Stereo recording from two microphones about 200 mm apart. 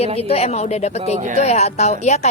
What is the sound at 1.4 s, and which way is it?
Speech, 35° left (ahead or behind).